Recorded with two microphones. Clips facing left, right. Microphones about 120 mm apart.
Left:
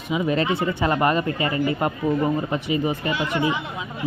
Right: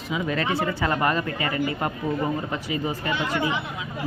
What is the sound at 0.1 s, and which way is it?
A man's voice, 20° left (ahead or behind).